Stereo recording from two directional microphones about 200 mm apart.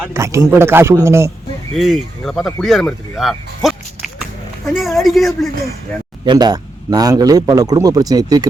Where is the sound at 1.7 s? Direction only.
Centre (ahead or behind).